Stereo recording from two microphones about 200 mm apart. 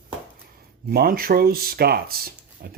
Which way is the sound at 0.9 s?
50° right (ahead or behind).